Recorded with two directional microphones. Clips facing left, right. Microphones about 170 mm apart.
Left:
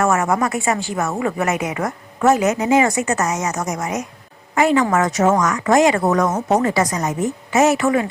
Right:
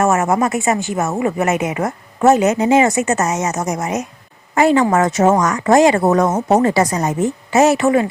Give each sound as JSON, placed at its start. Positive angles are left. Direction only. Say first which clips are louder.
{"t": 0.0, "sound": "a woman's voice", "louder": "right 3 dB", "side_deg": -25}